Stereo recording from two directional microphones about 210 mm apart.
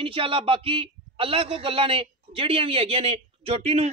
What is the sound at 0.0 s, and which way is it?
A man's voice, 25° right (ahead or behind).